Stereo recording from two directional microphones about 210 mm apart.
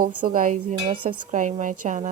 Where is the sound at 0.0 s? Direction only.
40° right (ahead or behind).